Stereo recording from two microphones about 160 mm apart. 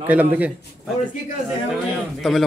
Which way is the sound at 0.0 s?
10° right (ahead or behind).